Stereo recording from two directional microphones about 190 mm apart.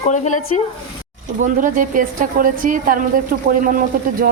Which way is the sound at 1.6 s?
45° right (ahead or behind).